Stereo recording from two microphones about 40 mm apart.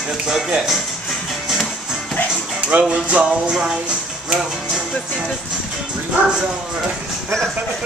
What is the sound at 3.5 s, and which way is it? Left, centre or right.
Speech, right.